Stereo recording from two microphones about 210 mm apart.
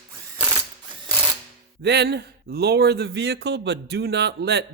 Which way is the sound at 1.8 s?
50° right (ahead or behind).